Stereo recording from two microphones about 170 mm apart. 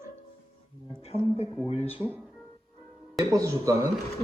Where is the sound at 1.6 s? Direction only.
35° left (ahead or behind).